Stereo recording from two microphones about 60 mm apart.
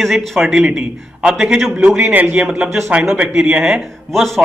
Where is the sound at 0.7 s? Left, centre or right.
Centre.